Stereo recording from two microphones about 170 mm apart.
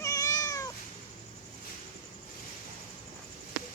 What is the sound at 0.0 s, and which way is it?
Cat, 20° left (ahead or behind).